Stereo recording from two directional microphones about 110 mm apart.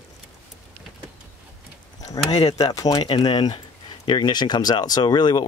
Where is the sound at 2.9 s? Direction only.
45° left (ahead or behind).